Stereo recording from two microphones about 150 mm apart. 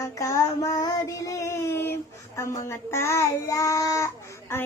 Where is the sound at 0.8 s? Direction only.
20° left (ahead or behind).